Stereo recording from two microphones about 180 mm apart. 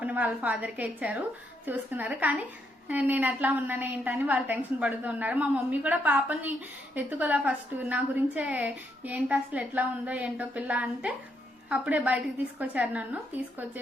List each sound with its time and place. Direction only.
0.0 s a woman's voice: 10° right (ahead or behind)